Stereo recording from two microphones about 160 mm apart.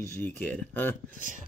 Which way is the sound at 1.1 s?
55° right (ahead or behind).